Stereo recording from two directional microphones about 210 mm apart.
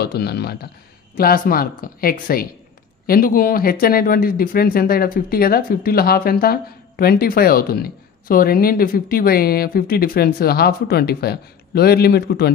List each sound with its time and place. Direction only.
0.0 s speech: 50° left (ahead or behind)